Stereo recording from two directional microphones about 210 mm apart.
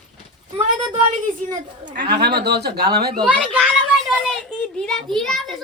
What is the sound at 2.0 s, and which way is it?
Speech, 50° right (ahead or behind).